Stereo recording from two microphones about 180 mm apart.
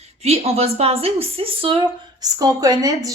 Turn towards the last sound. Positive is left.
turn(degrees=-20)  # may be behind; listen again after turning